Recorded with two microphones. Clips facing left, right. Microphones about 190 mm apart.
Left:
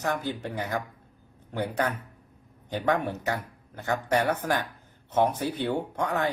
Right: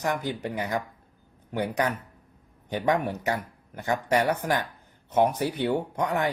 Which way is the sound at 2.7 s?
20° right (ahead or behind).